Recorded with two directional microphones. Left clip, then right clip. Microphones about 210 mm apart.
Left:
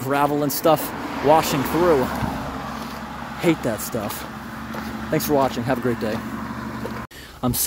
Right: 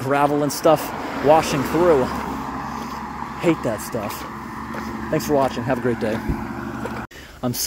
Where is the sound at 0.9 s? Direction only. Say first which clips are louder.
Right 1 dB; 55° right (ahead or behind).